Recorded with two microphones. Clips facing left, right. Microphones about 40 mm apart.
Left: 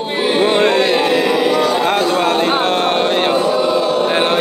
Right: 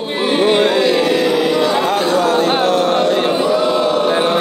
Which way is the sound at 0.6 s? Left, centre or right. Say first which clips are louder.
Even; left.